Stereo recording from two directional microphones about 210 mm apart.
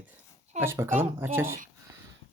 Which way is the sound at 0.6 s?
10° right (ahead or behind).